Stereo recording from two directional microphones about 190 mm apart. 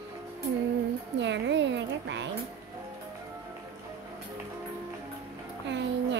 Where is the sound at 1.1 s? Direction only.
70° right (ahead or behind).